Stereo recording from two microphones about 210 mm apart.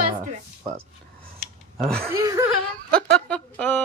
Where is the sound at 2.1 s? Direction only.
15° right (ahead or behind).